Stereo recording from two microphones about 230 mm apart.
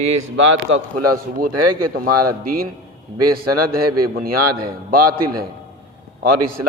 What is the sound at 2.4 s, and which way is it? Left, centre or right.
Speech, right.